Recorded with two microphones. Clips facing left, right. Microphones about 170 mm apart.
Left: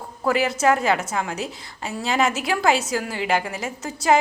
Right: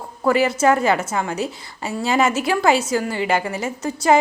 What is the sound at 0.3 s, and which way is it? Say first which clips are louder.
A woman's voice: right 3 dB; centre (ahead or behind).